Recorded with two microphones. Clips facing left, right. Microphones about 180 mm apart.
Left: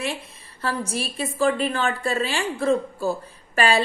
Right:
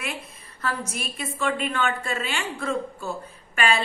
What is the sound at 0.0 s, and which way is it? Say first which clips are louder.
A woman's voice: left 5 dB; 30° left (ahead or behind).